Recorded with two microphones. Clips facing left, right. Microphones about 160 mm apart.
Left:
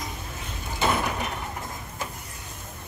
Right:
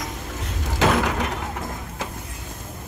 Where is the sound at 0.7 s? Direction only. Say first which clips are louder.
Right 5 dB; 90° right.